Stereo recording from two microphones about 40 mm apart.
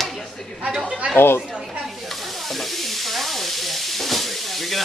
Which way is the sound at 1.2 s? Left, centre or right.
Left.